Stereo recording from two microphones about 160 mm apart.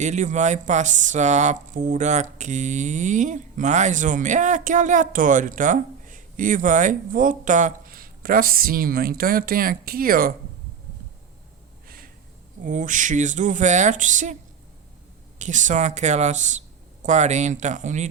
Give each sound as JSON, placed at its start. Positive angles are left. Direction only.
{"t": 0.0, "sound": "speech", "side_deg": -50}
{"t": 11.9, "sound": "a sound", "side_deg": -65}
{"t": 12.6, "sound": "speech", "side_deg": -55}
{"t": 15.4, "sound": "speech", "side_deg": -50}